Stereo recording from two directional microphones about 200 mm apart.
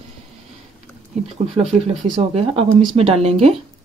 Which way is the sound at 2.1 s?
30° right (ahead or behind).